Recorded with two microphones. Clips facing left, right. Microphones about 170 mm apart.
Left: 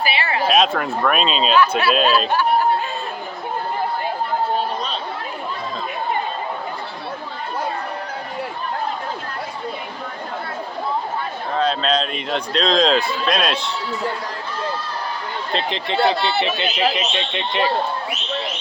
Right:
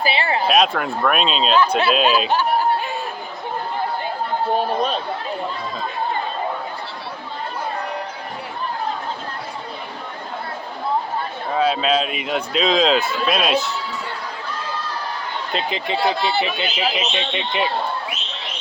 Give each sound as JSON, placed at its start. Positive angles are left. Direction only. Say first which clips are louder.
{"t": 0.0, "sound": "a sound", "louder": "right 1 dB", "side_deg": -30}
{"t": 0.4, "sound": "speech", "louder": "left 1 dB", "side_deg": 0}
{"t": 11.5, "sound": "speech", "louder": "right 1 dB", "side_deg": -10}
{"t": 15.5, "sound": "speech", "louder": "left 2 dB", "side_deg": -5}